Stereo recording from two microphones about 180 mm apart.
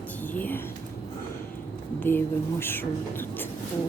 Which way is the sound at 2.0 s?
10° left (ahead or behind).